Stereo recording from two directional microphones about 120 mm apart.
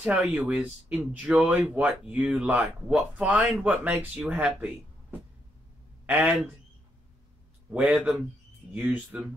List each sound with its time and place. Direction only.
0.0 s speech: 10° right (ahead or behind)
6.0 s speech: 15° right (ahead or behind)
7.7 s speech: 10° right (ahead or behind)